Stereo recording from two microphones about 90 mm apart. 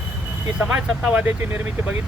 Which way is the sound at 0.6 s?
15° right (ahead or behind).